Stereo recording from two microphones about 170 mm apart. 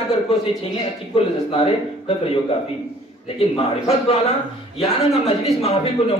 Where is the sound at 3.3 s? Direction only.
35° left (ahead or behind).